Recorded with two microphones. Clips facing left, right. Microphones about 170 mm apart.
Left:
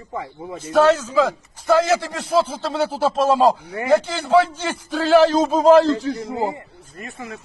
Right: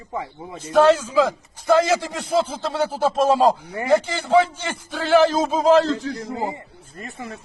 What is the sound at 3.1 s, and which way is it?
Speech, 10° right (ahead or behind).